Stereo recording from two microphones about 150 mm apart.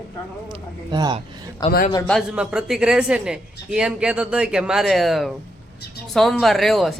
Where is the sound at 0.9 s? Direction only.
30° right (ahead or behind).